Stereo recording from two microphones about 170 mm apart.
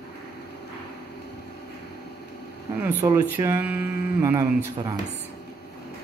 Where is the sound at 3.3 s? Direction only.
10° right (ahead or behind).